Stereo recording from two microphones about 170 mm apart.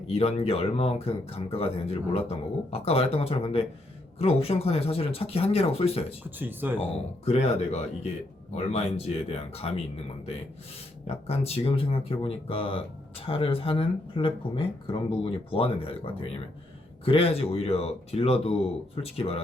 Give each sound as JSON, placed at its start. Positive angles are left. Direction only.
{"t": 0.1, "sound": "speech", "side_deg": 40}
{"t": 6.4, "sound": "speech", "side_deg": -10}
{"t": 7.3, "sound": "speech", "side_deg": 40}